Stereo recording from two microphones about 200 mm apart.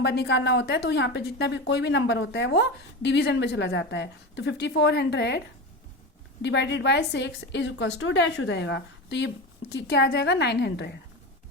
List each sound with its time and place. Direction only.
0.0 s a woman's voice: 55° left (ahead or behind)
6.4 s a woman's voice: 60° left (ahead or behind)